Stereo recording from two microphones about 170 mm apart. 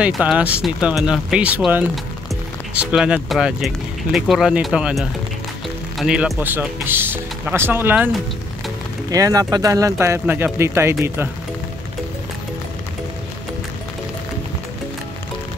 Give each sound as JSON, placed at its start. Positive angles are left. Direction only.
{"t": 0.0, "sound": "speech", "side_deg": -10}
{"t": 9.1, "sound": "speech", "side_deg": -20}